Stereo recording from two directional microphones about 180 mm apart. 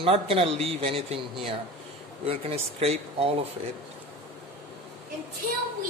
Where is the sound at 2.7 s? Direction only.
35° right (ahead or behind).